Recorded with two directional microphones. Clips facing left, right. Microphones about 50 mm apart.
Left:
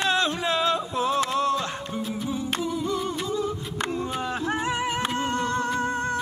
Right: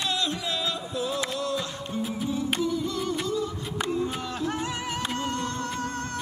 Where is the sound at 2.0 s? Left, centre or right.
Centre.